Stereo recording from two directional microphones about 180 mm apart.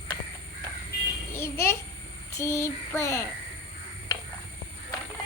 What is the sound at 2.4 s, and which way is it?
Speech, 15° left (ahead or behind).